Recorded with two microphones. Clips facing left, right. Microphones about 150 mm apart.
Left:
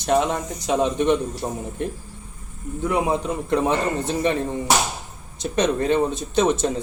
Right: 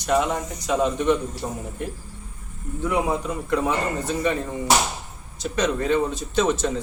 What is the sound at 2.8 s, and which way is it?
Speech, 20° left (ahead or behind).